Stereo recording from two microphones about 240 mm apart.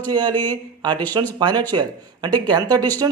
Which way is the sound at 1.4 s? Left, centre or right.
Centre.